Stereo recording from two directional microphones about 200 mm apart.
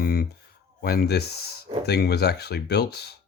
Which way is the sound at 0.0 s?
50° left (ahead or behind).